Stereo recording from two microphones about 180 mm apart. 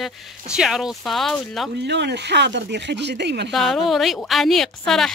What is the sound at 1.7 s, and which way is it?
Speech, 70° right (ahead or behind).